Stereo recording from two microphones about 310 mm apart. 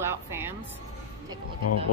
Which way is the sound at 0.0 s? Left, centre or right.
Centre.